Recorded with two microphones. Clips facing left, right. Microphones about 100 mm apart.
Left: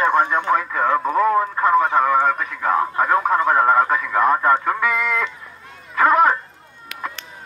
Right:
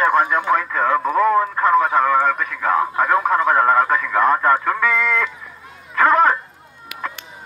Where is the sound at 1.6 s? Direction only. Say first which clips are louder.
Even; 25° left (ahead or behind).